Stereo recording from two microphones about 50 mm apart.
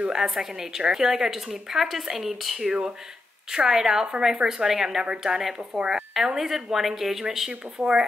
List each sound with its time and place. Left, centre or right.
0.1 s a woman's voice: centre
6.1 s a woman's voice: centre